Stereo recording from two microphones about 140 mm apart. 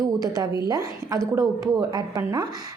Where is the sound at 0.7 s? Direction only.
25° right (ahead or behind).